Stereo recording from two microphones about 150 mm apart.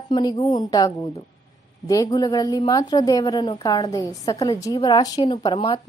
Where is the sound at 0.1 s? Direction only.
25° left (ahead or behind).